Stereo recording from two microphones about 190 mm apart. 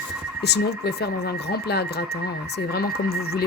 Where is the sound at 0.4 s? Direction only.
60° left (ahead or behind).